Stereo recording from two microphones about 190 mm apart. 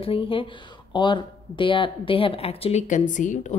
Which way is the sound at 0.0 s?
30° left (ahead or behind).